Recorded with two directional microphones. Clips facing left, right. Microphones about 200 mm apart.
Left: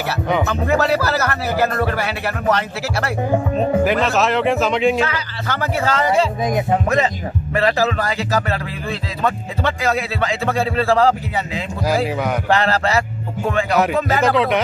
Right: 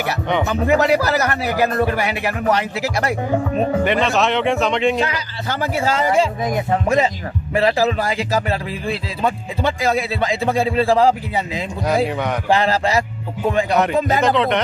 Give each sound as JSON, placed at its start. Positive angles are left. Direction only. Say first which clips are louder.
{"t": 0.5, "sound": "a man's voice", "louder": "right 5 dB", "side_deg": -15}
{"t": 3.8, "sound": "speech", "louder": "even", "side_deg": 0}
{"t": 5.0, "sound": "a man's voice", "louder": "even", "side_deg": -10}
{"t": 6.4, "sound": "speech", "louder": "left 1 dB", "side_deg": 20}
{"t": 7.5, "sound": "a man's voice", "louder": "right 1 dB", "side_deg": -15}
{"t": 11.8, "sound": "speech", "louder": "even", "side_deg": 0}
{"t": 12.4, "sound": "a man's voice", "louder": "right 2 dB", "side_deg": -10}
{"t": 13.7, "sound": "speech", "louder": "even", "side_deg": 5}